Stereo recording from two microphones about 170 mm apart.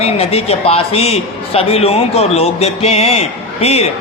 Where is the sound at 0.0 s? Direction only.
35° left (ahead or behind).